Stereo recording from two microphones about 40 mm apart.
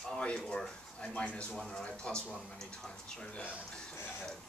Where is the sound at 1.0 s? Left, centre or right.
Left.